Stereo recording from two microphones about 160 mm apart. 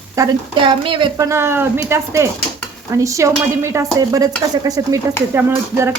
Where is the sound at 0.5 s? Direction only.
30° right (ahead or behind).